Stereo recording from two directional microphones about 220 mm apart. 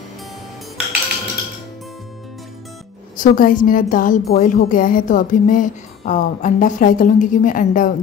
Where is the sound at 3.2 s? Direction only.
40° left (ahead or behind).